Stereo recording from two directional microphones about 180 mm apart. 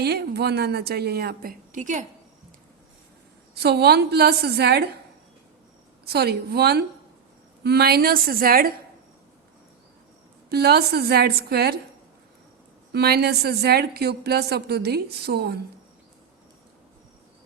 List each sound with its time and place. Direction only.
0.0 s a woman's voice: 65° right (ahead or behind); by 2.0 s 45° right (ahead or behind)
3.5 s a woman's voice: 65° right (ahead or behind)
6.1 s a woman's voice: 60° right (ahead or behind)
10.5 s a woman's voice: 60° right (ahead or behind)
12.9 s a woman's voice: 60° right (ahead or behind)